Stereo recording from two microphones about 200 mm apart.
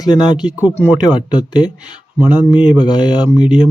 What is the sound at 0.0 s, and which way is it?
Speech, 20° left (ahead or behind).